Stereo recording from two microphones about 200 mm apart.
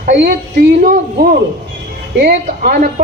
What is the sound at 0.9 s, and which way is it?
A woman's voice, 45° right (ahead or behind).